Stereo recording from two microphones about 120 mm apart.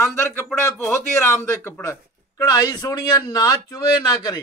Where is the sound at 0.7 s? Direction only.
20° left (ahead or behind).